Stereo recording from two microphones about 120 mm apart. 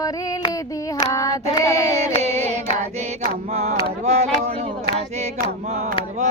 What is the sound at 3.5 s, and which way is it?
Speech, 70° right (ahead or behind).